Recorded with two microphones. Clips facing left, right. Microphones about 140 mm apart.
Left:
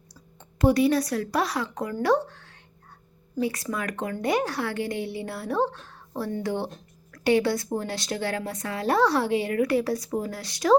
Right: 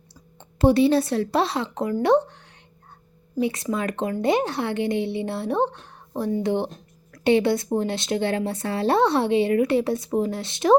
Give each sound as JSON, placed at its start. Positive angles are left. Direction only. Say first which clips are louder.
{"t": 0.1, "sound": "a woman's voice", "louder": "right 2 dB", "side_deg": -30}